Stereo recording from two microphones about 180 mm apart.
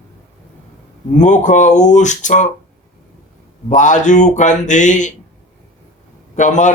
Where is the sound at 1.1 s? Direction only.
45° left (ahead or behind).